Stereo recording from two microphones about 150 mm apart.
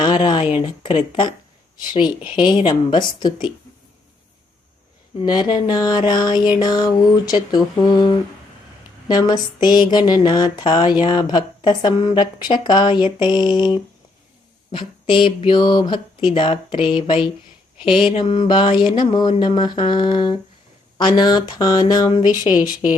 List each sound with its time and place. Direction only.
0.0 s speech: 30° left (ahead or behind)
5.2 s speech: 30° left (ahead or behind)